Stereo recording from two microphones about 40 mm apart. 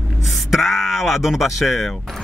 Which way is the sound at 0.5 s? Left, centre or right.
Centre.